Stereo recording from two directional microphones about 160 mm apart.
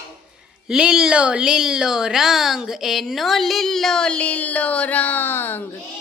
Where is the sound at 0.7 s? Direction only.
5° right (ahead or behind); by 5.5 s 15° left (ahead or behind).